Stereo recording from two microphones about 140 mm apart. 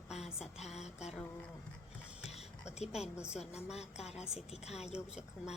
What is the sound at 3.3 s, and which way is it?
Speech, 50° left (ahead or behind).